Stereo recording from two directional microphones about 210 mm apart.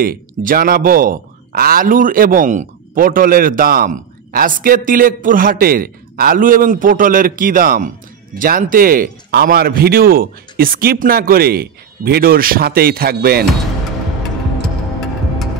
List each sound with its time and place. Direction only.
0.0 s a man's voice: 40° right (ahead or behind)